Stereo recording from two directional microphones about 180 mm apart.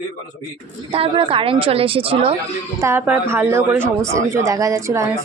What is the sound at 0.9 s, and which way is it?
A woman's voice, 30° right (ahead or behind).